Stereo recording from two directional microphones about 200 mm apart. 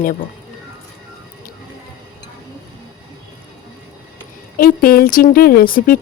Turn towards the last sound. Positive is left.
turn(degrees=45)  # may be behind; listen again after turning